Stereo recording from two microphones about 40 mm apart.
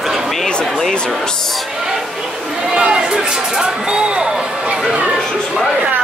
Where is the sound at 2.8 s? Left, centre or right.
Right.